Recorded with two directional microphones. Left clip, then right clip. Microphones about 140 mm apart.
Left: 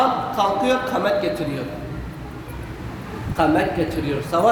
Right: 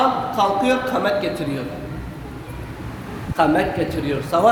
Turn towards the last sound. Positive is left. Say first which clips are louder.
# right 1 dB
turn(degrees=-25)  # may be behind; listen again after turning